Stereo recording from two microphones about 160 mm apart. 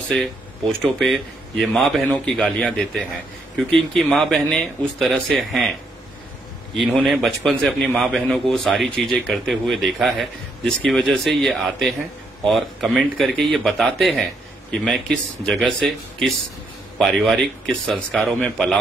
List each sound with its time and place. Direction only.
0.1 s a man's voice: centre (ahead or behind)
6.8 s a man's voice: centre (ahead or behind)